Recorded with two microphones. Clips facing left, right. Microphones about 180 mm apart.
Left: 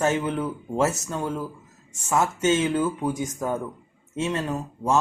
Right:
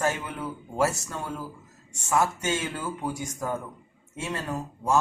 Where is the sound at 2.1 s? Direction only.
20° left (ahead or behind).